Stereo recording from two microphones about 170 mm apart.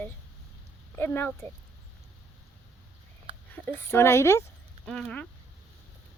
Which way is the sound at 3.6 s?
15° left (ahead or behind).